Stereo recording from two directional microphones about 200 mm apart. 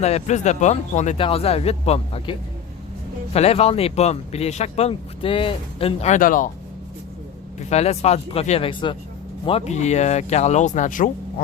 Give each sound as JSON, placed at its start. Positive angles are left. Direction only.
{"t": 0.0, "sound": "speech", "side_deg": 35}
{"t": 3.3, "sound": "speech", "side_deg": 30}
{"t": 7.6, "sound": "speech", "side_deg": 35}